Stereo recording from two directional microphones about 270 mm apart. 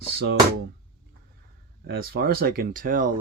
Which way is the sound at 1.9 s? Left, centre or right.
Right.